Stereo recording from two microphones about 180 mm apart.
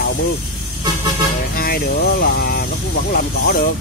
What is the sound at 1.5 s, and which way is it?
Speech, 55° left (ahead or behind).